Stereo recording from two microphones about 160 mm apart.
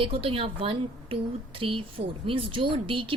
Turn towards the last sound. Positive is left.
turn(degrees=-35)  # may be behind; listen again after turning